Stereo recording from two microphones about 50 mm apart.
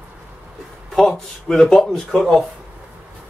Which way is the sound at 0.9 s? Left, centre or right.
Centre.